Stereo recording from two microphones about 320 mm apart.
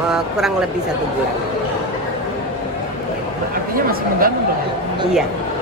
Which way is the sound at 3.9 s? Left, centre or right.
Right.